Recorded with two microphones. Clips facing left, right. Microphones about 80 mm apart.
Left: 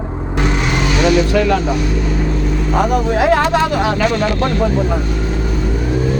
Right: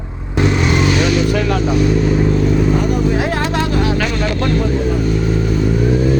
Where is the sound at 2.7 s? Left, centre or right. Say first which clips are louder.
Left 2 dB; left.